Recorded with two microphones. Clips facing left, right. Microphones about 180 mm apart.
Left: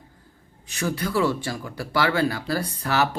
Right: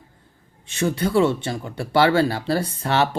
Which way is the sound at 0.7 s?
25° right (ahead or behind).